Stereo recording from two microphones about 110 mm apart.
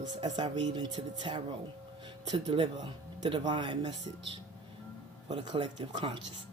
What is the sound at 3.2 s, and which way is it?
Speech, 50° right (ahead or behind).